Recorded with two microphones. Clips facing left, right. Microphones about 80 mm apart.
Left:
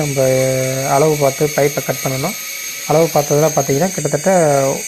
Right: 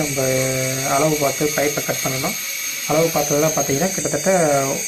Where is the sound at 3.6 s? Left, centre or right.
Left.